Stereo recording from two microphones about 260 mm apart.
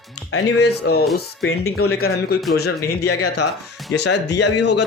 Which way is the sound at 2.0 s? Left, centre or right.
Left.